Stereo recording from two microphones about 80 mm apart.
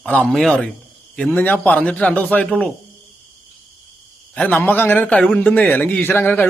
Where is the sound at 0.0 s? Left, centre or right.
Centre.